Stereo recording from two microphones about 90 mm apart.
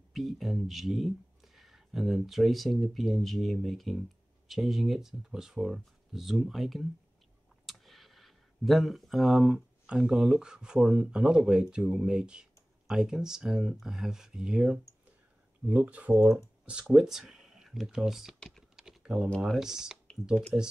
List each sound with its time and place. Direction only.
0.1 s speech: centre (ahead or behind)
18.8 s typing: 5° right (ahead or behind)
19.4 s speech: 5° right (ahead or behind)